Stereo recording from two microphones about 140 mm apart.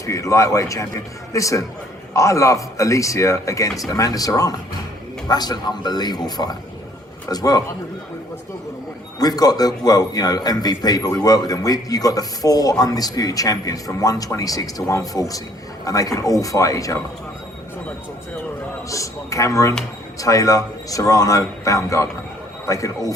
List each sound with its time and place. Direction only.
0.0 s a man's voice: 25° left (ahead or behind)
9.1 s a man's voice: 25° left (ahead or behind)
18.9 s a man's voice: 25° left (ahead or behind)